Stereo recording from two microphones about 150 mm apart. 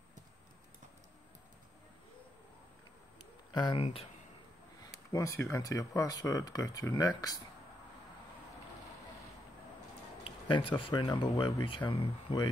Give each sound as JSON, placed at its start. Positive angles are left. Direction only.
{"t": 3.5, "sound": "speech", "side_deg": 30}
{"t": 5.1, "sound": "speech", "side_deg": 20}
{"t": 10.2, "sound": "a sound", "side_deg": 35}
{"t": 10.8, "sound": "speech", "side_deg": 30}